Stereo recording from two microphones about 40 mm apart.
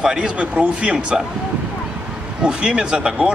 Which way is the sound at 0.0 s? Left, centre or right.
Right.